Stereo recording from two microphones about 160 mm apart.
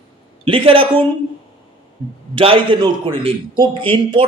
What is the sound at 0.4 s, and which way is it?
Speech, 35° right (ahead or behind).